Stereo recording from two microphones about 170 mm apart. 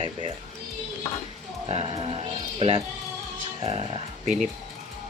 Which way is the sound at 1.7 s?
35° right (ahead or behind).